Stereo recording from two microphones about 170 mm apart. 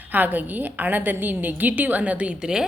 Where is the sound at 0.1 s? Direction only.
10° right (ahead or behind).